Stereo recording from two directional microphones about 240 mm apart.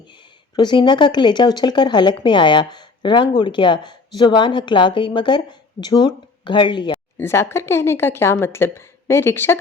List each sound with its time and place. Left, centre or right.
0.5 s speech: centre